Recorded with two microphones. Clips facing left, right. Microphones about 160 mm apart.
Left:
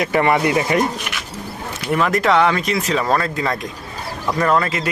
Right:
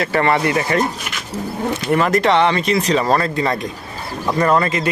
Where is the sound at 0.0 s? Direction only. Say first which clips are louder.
Even; 15° left (ahead or behind).